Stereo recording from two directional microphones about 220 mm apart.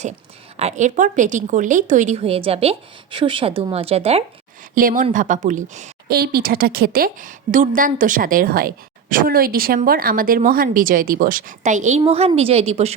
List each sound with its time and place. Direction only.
0.5 s a woman's voice: 30° right (ahead or behind)
4.7 s a woman's voice: 40° right (ahead or behind)